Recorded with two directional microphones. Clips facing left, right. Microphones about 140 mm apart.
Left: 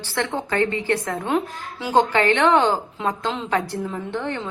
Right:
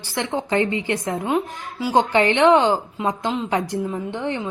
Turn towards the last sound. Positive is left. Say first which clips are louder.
# right 1 dB
turn(degrees=-15)  # may be behind; listen again after turning